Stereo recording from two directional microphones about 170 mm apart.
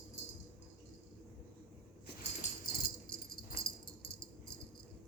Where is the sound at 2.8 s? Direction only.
60° left (ahead or behind).